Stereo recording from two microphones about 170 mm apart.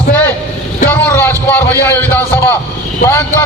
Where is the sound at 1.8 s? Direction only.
15° left (ahead or behind).